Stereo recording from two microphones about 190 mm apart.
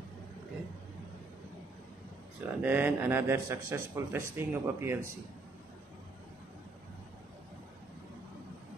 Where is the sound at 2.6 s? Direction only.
10° right (ahead or behind).